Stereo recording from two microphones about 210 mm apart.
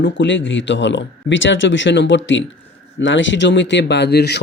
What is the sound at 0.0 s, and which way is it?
Speech, 60° left (ahead or behind).